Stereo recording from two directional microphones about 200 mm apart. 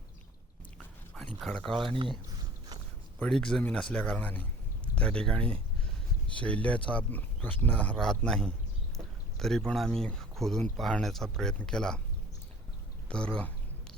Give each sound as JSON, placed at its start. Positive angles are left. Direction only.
{"t": 1.1, "sound": "speech", "side_deg": 5}
{"t": 1.9, "sound": "speech", "side_deg": -25}
{"t": 3.2, "sound": "speech", "side_deg": 5}
{"t": 13.1, "sound": "speech", "side_deg": 5}